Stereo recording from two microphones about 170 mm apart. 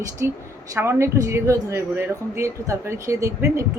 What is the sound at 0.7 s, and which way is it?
Speech, 15° right (ahead or behind).